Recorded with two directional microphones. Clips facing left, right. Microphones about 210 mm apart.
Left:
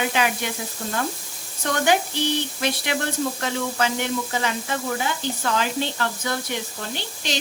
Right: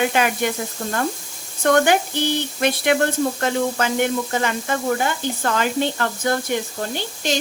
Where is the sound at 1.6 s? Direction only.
60° right (ahead or behind).